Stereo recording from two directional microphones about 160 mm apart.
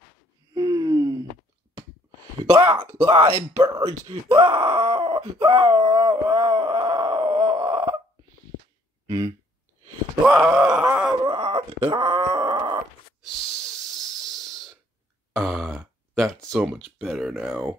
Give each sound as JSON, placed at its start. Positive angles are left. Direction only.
{"t": 0.6, "sound": "gasp", "side_deg": -25}
{"t": 2.4, "sound": "speech", "side_deg": -25}
{"t": 3.3, "sound": "speech", "side_deg": -20}
{"t": 4.3, "sound": "groan", "side_deg": -35}
{"t": 9.0, "sound": "a sound", "side_deg": -25}
{"t": 10.2, "sound": "groan", "side_deg": -10}
{"t": 11.2, "sound": "groan", "side_deg": -30}
{"t": 13.9, "sound": "hiss", "side_deg": 0}
{"t": 15.3, "sound": "speech", "side_deg": 0}